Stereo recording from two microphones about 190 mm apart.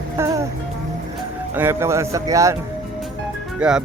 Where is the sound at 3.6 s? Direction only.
5° right (ahead or behind).